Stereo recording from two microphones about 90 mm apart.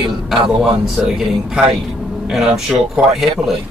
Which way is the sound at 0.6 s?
5° right (ahead or behind).